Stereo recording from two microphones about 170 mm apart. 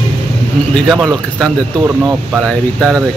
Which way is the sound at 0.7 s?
Centre (ahead or behind).